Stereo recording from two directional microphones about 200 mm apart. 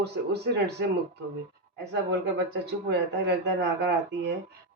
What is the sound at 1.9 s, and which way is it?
Speech, 55° right (ahead or behind).